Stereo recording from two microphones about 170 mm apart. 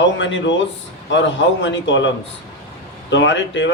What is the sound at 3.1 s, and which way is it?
Speech, 90° left.